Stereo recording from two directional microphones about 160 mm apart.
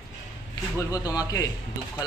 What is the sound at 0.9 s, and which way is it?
Speech, 20° left (ahead or behind).